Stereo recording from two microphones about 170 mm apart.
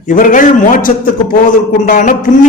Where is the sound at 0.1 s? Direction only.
50° left (ahead or behind).